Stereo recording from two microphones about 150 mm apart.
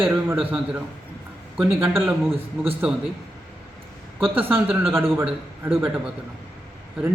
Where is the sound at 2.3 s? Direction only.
40° right (ahead or behind).